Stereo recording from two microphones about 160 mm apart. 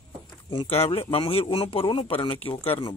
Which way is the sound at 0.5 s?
35° left (ahead or behind).